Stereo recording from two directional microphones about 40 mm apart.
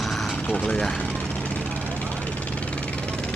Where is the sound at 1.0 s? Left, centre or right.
Left.